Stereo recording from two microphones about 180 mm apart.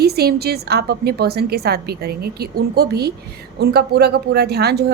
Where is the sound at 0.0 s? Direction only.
60° right (ahead or behind).